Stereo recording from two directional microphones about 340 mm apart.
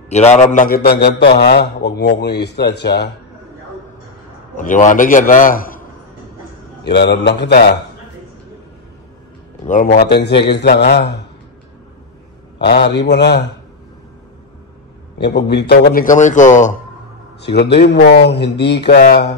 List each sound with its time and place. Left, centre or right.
0.1 s a man's voice: centre
4.6 s a man's voice: left
6.8 s a man's voice: left
9.7 s a man's voice: left
12.5 s a man's voice: left
15.1 s a man's voice: left